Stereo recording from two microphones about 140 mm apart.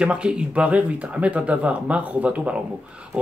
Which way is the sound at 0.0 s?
5° right (ahead or behind).